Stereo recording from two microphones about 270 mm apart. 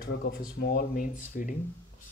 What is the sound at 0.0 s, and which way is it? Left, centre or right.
Speech, left.